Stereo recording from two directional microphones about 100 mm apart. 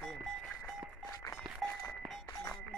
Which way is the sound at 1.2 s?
25° left (ahead or behind).